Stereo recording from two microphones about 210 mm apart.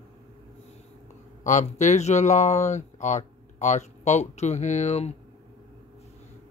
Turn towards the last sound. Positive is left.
turn(degrees=30)  # may be behind; listen again after turning